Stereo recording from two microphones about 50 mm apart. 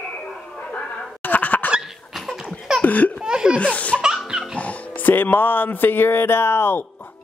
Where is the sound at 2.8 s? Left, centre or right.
Left.